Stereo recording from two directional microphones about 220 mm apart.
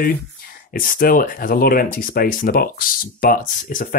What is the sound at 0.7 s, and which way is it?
Speech, 40° left (ahead or behind).